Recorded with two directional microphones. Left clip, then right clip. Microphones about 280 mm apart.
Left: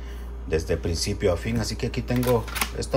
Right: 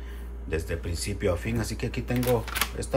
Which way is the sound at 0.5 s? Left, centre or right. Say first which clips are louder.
Left 6 dB; centre.